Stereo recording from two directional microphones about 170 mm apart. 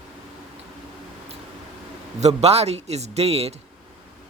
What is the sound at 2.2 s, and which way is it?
A man's voice, 40° right (ahead or behind).